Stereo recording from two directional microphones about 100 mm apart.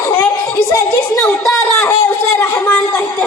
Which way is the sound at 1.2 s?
Centre (ahead or behind).